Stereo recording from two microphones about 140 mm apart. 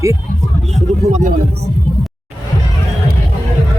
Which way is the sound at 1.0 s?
55° right (ahead or behind).